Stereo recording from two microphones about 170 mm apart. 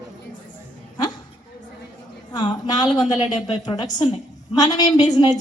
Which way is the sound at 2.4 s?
25° left (ahead or behind).